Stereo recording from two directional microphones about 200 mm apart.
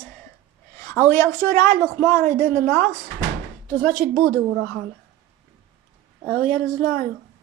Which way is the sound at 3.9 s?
50° right (ahead or behind).